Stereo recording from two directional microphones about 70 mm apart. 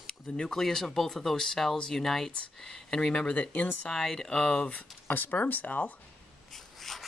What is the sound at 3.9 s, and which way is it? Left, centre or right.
Speech, centre.